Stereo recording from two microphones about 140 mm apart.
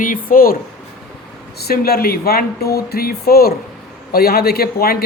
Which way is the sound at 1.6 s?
90° left.